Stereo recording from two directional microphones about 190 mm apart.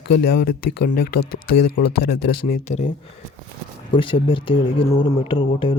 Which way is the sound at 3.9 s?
25° left (ahead or behind).